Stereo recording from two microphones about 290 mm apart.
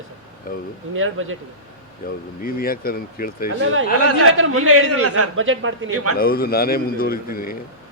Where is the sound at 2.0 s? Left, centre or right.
Left.